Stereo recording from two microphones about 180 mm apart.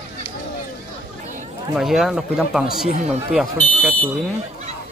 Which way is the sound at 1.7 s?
Centre (ahead or behind).